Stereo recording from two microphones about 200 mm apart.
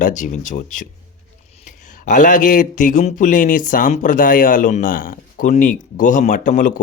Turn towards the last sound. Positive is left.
turn(degrees=40)  # may be behind; listen again after turning